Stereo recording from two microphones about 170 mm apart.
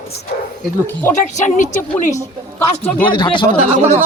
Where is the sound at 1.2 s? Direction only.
45° left (ahead or behind).